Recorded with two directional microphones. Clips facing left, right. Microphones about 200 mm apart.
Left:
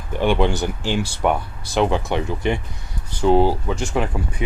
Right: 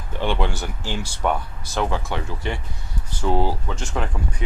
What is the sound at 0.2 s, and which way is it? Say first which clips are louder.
Speech: left 6 dB; 15° left (ahead or behind).